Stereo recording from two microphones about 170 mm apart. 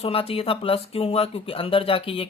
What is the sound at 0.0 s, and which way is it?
Speech, 35° left (ahead or behind).